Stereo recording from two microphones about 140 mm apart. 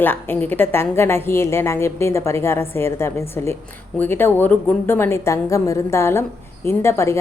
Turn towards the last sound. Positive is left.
turn(degrees=20)  # may be behind; listen again after turning